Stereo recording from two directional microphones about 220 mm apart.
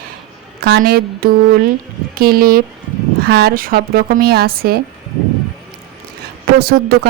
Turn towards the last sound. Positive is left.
turn(degrees=-45)  # may be behind; listen again after turning